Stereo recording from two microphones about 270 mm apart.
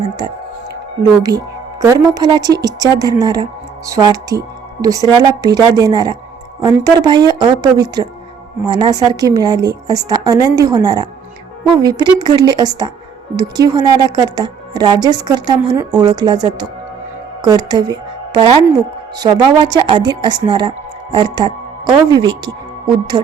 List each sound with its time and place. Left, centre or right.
1.8 s a woman's voice: centre